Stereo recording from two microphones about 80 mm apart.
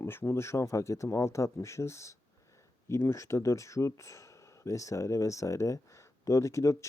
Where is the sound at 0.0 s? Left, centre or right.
Left.